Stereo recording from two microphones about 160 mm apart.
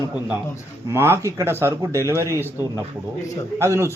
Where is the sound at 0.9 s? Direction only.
15° right (ahead or behind).